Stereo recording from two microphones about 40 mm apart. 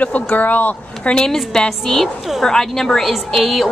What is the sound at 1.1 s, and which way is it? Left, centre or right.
A woman's voice, centre.